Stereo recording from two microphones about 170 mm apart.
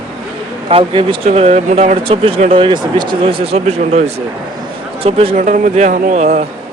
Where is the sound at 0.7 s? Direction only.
30° right (ahead or behind).